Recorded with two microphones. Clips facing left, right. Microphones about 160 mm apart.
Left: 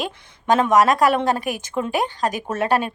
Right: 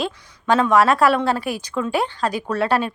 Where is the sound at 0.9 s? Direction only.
15° left (ahead or behind).